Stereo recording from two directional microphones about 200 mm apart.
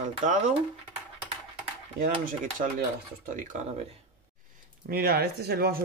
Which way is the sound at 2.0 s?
45° right (ahead or behind).